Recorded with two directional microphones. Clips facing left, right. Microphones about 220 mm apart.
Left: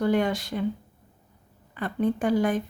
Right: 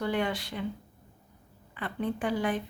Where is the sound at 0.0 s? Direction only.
45° left (ahead or behind).